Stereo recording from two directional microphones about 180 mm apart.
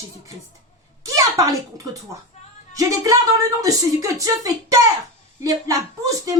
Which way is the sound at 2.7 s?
20° right (ahead or behind).